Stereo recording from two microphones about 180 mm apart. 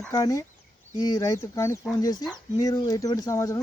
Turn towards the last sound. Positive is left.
turn(degrees=20)  # may be behind; listen again after turning